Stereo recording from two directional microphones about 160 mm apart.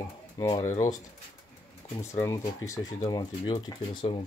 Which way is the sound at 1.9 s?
20° left (ahead or behind).